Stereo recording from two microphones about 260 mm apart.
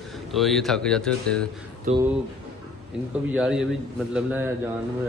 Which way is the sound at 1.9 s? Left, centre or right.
Right.